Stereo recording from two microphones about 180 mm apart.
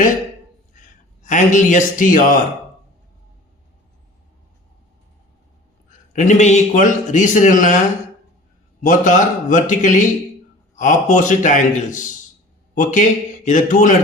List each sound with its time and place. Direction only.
0.8 s a man's voice: 45° left (ahead or behind)
6.1 s a man's voice: 40° left (ahead or behind)
8.8 s a man's voice: 45° left (ahead or behind)